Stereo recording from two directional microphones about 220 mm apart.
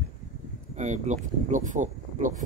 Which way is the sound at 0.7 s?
35° right (ahead or behind).